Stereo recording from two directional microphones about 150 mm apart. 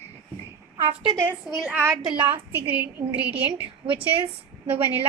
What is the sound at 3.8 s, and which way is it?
Speech, 35° right (ahead or behind).